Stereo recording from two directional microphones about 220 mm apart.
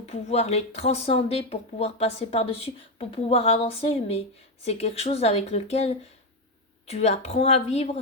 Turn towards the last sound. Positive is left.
turn(degrees=30)  # may be behind; listen again after turning